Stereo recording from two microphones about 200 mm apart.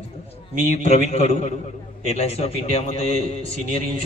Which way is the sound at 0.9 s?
35° left (ahead or behind).